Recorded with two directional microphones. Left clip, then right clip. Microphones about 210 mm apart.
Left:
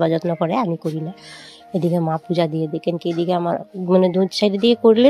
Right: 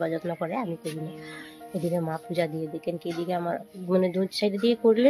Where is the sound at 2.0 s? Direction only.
30° left (ahead or behind).